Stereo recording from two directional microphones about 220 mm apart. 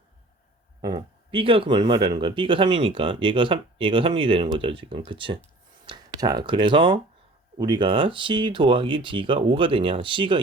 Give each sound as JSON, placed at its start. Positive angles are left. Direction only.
{"t": 0.8, "sound": "speech", "side_deg": -20}